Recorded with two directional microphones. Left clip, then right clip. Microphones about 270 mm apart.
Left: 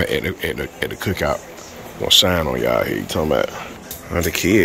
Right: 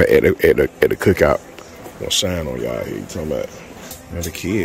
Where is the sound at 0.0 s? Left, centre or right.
Centre.